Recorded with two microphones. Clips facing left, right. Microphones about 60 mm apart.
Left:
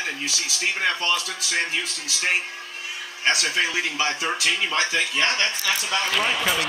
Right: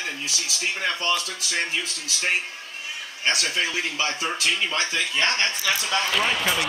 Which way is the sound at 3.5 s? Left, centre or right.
Left.